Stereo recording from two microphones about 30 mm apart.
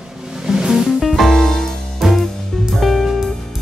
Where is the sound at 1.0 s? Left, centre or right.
Centre.